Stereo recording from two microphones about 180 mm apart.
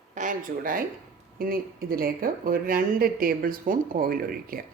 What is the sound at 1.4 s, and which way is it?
Speech, 55° right (ahead or behind).